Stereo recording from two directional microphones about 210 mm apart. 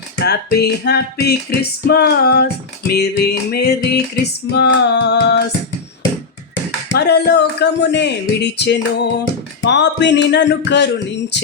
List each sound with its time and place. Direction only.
0.3 s music: 50° left (ahead or behind)
6.9 s music: 50° left (ahead or behind)